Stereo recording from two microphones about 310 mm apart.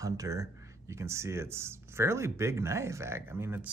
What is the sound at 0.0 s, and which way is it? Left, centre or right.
Speech, centre.